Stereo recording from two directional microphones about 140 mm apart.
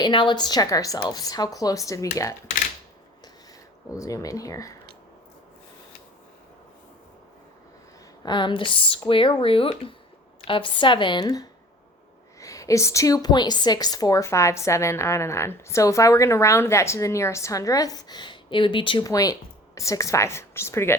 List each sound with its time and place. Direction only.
0.0 s a woman's voice: 35° left (ahead or behind)
3.9 s a woman's voice: 25° left (ahead or behind)
8.2 s a woman's voice: 35° left (ahead or behind)